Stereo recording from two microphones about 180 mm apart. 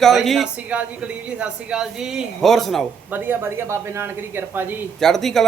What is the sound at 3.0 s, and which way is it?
A woman's voice, 10° right (ahead or behind).